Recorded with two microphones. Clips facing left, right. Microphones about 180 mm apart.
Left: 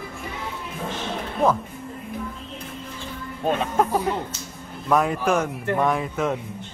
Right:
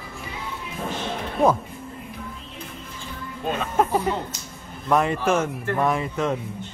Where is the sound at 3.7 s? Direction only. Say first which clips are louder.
Even; 5° right (ahead or behind).